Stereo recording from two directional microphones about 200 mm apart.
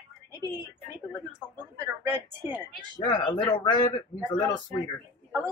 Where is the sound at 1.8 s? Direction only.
15° right (ahead or behind).